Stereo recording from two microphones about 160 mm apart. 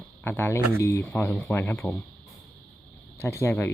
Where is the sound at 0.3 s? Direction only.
15° left (ahead or behind).